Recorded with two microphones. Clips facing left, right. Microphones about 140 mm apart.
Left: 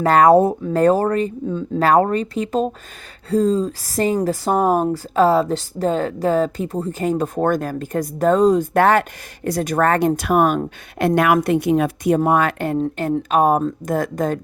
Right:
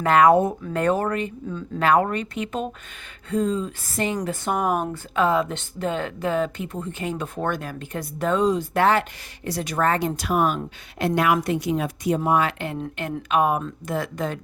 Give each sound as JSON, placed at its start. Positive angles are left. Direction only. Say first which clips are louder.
{"t": 0.0, "sound": "a woman's voice", "louder": "left 4 dB", "side_deg": 40}